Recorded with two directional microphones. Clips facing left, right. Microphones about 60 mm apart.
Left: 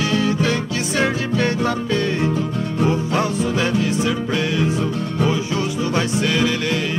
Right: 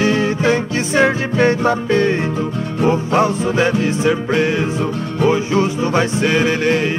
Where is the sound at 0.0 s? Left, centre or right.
Right.